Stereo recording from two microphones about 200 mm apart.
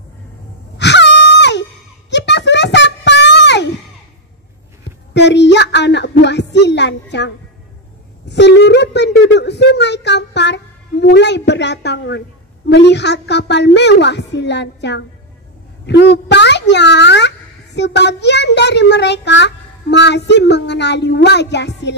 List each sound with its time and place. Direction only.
0.7 s wail: 60° left (ahead or behind)
5.1 s a sound: 60° left (ahead or behind)
12.6 s a child's voice: 60° left (ahead or behind)